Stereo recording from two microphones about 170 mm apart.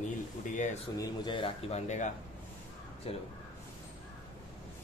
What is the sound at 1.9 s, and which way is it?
Speech, 45° left (ahead or behind).